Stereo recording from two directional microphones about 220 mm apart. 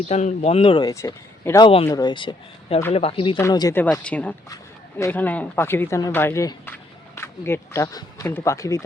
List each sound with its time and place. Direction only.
0.1 s speech: 30° left (ahead or behind); by 8.8 s 15° left (ahead or behind)